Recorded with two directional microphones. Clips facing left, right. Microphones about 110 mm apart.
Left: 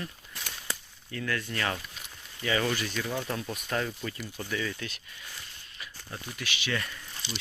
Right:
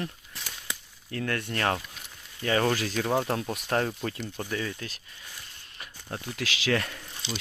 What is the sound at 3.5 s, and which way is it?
Speech, 70° right (ahead or behind).